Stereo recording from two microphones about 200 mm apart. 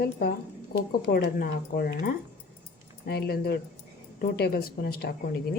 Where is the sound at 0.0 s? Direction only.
50° left (ahead or behind).